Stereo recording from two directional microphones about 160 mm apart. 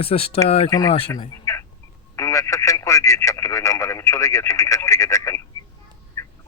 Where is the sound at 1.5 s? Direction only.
20° left (ahead or behind).